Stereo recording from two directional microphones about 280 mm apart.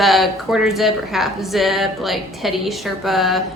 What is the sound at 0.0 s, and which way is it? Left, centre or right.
A woman's voice, centre.